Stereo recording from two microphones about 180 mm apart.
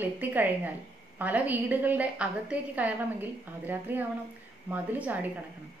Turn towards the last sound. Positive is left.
turn(degrees=-10)  # may be behind; listen again after turning